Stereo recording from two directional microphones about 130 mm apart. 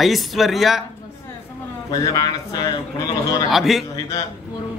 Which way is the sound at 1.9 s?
30° left (ahead or behind).